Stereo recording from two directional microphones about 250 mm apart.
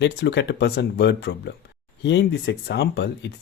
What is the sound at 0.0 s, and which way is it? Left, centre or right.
Speech, left.